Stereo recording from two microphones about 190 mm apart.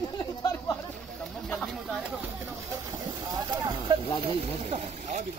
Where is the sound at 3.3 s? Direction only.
20° right (ahead or behind).